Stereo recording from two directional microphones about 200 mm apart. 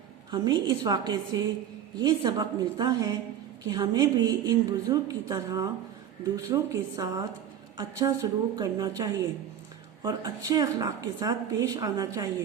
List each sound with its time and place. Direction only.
0.3 s a woman's voice: 20° right (ahead or behind)